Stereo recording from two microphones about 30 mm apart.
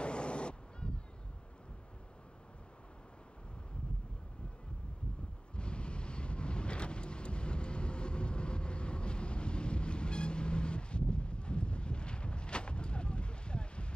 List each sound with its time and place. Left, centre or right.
0.0 s vehicle: left
5.6 s vehicle: left